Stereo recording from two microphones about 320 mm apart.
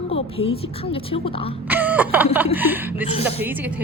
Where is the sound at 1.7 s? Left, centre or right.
Centre.